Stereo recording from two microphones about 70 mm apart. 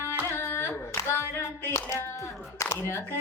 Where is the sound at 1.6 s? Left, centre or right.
Left.